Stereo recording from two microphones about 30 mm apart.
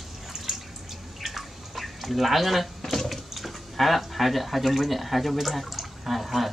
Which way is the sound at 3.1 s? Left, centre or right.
Centre.